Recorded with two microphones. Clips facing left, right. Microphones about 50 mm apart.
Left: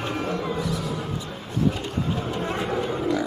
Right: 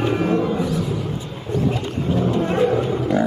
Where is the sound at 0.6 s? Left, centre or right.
Right.